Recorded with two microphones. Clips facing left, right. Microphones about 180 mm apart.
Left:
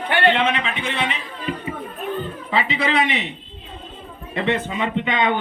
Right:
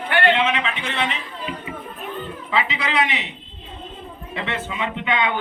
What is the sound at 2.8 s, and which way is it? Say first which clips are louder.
Speech: left 3 dB; centre (ahead or behind).